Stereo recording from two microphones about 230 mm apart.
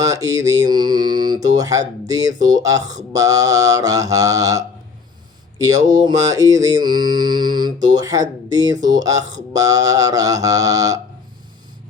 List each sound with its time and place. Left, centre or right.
0.0 s mantra: centre
6.0 s mantra: centre